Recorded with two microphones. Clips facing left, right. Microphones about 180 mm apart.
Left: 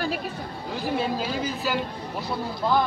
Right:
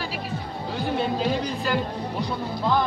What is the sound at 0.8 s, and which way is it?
Speech, centre (ahead or behind).